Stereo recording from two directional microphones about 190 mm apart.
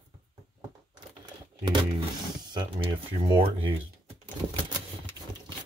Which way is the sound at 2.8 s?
25° right (ahead or behind).